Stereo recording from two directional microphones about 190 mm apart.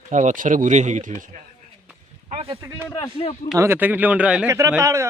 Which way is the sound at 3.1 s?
30° left (ahead or behind).